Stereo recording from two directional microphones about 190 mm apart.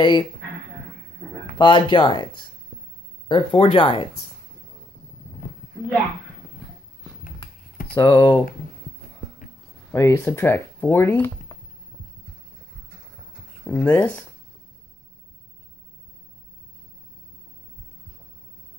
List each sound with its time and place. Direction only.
0.0 s speech: 25° left (ahead or behind)
1.6 s speech: 25° left (ahead or behind)
7.2 s a sound: 50° left (ahead or behind)
8.0 s speech: 25° left (ahead or behind)
9.9 s speech: 15° left (ahead or behind)
13.7 s speech: 10° left (ahead or behind)